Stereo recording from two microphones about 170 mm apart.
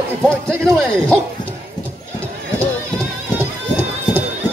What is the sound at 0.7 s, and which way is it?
Speech, 5° left (ahead or behind).